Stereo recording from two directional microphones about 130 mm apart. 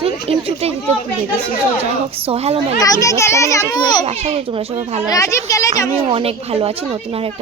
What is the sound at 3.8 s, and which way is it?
Speech, 35° left (ahead or behind).